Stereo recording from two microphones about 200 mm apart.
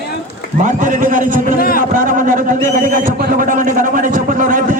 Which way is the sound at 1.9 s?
40° right (ahead or behind).